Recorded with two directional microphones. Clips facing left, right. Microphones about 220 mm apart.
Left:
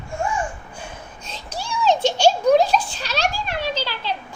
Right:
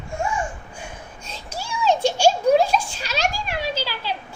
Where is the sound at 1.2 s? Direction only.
10° right (ahead or behind).